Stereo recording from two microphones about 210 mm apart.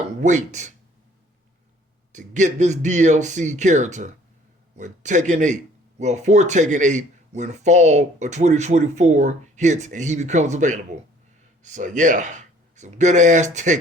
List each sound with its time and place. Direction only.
0.2 s speech: 35° right (ahead or behind)
2.1 s speech: 35° right (ahead or behind)